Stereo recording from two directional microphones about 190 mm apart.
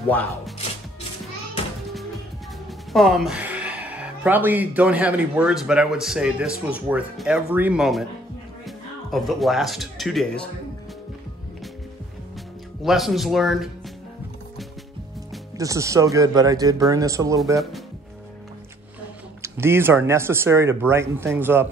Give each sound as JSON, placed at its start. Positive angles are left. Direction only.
{"t": 0.1, "sound": "speech", "side_deg": 10}
{"t": 2.9, "sound": "speech", "side_deg": 0}
{"t": 12.8, "sound": "speech", "side_deg": 0}
{"t": 15.5, "sound": "speech", "side_deg": -15}
{"t": 19.4, "sound": "speech", "side_deg": -10}